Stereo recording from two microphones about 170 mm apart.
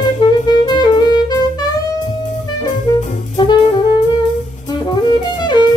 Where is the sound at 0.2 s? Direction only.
25° left (ahead or behind).